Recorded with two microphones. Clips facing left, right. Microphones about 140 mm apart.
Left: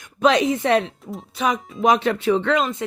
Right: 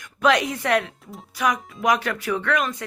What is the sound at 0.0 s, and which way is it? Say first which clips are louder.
A woman's voice: left 3 dB; 20° left (ahead or behind).